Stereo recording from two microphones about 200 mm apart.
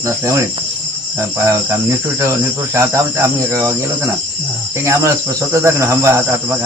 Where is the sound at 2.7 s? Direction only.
15° right (ahead or behind).